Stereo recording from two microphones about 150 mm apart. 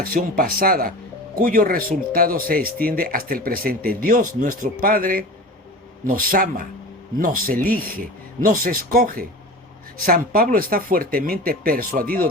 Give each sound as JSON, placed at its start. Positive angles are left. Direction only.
{"t": 0.0, "sound": "speech", "side_deg": -75}